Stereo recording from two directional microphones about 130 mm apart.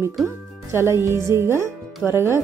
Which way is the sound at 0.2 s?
Centre (ahead or behind).